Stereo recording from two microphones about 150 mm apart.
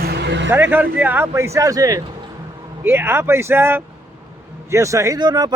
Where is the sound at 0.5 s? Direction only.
15° right (ahead or behind).